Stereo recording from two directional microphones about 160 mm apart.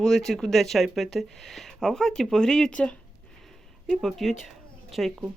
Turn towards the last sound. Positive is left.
turn(degrees=-5)  # may be behind; listen again after turning